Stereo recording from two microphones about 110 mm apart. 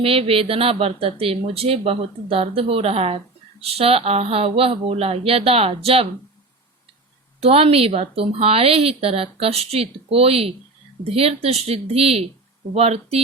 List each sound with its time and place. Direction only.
0.0 s speech: 60° right (ahead or behind)
7.4 s speech: 60° right (ahead or behind)